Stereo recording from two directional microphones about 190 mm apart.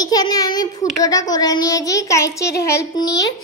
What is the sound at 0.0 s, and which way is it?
A child's voice, 20° left (ahead or behind).